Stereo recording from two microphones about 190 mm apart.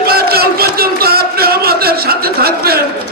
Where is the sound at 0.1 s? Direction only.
55° right (ahead or behind).